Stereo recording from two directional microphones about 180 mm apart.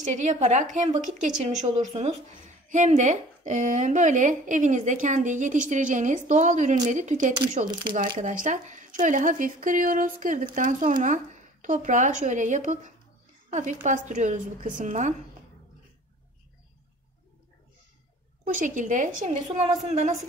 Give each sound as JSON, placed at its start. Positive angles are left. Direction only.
{"t": 0.0, "sound": "a woman's voice", "side_deg": -40}
{"t": 18.4, "sound": "a woman's voice", "side_deg": -45}